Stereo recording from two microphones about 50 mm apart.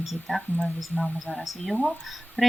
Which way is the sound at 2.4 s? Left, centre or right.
Left.